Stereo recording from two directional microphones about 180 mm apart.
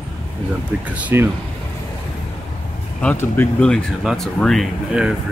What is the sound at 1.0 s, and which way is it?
Speech, 10° right (ahead or behind).